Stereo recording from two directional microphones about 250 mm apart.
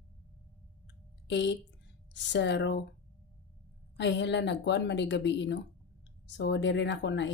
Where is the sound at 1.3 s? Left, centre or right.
Left.